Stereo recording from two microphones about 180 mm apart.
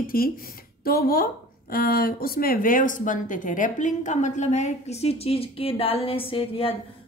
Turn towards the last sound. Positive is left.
turn(degrees=30)  # may be behind; listen again after turning